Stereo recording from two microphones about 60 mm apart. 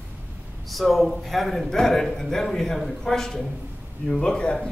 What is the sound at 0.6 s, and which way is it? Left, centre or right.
A man's voice, centre.